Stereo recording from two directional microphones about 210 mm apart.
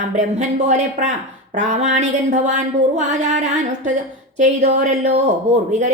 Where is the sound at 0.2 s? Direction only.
35° right (ahead or behind).